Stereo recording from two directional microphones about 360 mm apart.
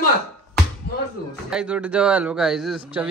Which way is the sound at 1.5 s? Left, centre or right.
Centre.